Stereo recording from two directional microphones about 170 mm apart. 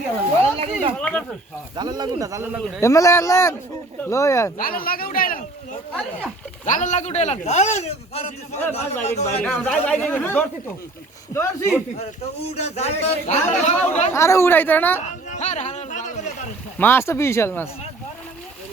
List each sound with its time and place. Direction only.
0.4 s speech: 35° right (ahead or behind)
0.9 s speech: 5° left (ahead or behind)
1.7 s speech: 25° right (ahead or behind)
2.8 s speech: 15° left (ahead or behind)
4.5 s speech: 60° left (ahead or behind)
6.7 s a man's voice: 45° left (ahead or behind)
9.2 s speech: 5° left (ahead or behind)
12.5 s a man's voice: 40° left (ahead or behind)
14.1 s speech: 15° left (ahead or behind)
15.3 s a sound: 45° left (ahead or behind)
16.7 s speech: 15° left (ahead or behind)